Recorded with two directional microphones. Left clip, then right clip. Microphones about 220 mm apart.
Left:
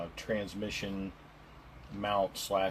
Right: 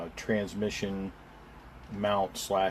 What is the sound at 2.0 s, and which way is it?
Speech, 50° right (ahead or behind).